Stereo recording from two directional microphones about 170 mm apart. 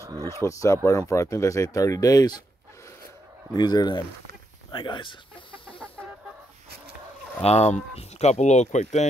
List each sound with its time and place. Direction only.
0.0 s a sound: 20° right (ahead or behind)
0.4 s speech: 20° left (ahead or behind)
3.5 s speech: 25° left (ahead or behind)
5.7 s chicken: 5° left (ahead or behind)
7.4 s speech: 40° left (ahead or behind)